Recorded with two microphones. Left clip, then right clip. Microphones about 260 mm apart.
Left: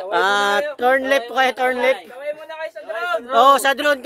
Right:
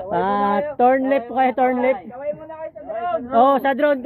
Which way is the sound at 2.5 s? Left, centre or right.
Left.